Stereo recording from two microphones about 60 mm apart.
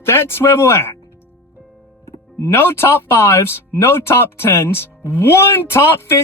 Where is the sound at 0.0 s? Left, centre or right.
Left.